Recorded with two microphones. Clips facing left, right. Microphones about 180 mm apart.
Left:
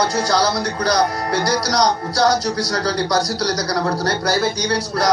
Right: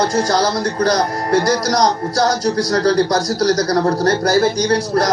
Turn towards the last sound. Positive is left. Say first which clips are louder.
# right 3 dB
turn(degrees=-50)  # may be behind; listen again after turning